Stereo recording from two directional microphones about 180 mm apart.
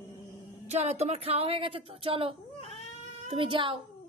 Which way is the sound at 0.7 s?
35° right (ahead or behind).